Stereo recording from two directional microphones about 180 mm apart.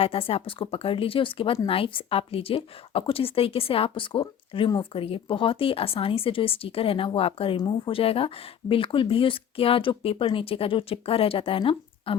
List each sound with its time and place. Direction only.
0.0 s a woman's voice: 30° left (ahead or behind)